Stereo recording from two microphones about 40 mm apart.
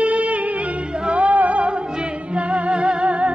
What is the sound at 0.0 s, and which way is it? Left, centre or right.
Music, right.